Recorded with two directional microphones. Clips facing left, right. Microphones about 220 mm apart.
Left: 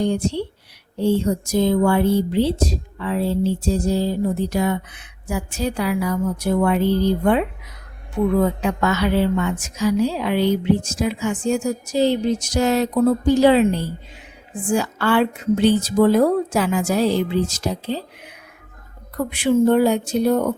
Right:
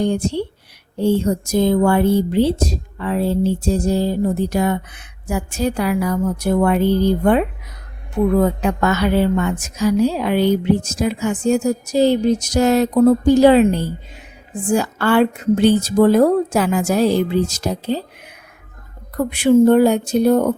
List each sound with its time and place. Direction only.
0.0 s speech: 50° right (ahead or behind)